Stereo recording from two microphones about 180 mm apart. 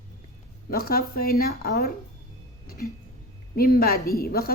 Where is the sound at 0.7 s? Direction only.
55° left (ahead or behind).